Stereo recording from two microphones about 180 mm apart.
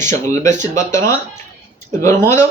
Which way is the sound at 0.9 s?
15° left (ahead or behind).